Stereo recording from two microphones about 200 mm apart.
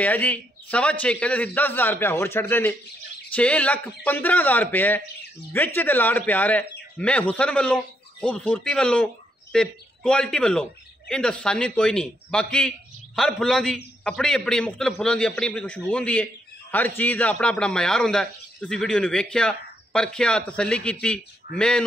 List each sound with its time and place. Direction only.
0.0 s a man's voice: 10° left (ahead or behind)